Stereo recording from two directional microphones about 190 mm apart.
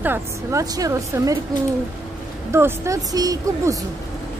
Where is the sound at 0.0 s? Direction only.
15° right (ahead or behind).